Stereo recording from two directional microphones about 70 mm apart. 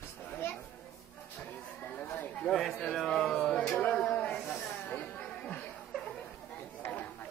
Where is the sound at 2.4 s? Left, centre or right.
Centre.